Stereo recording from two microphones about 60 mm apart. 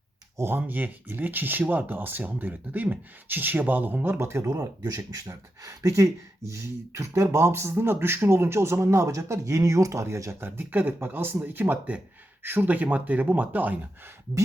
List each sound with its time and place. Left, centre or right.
0.3 s speech: right
4.2 s speech: right
4.4 s speech: right
4.9 s speech: right
10.4 s speech: right